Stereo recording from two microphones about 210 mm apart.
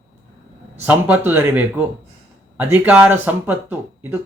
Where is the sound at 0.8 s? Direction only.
10° right (ahead or behind).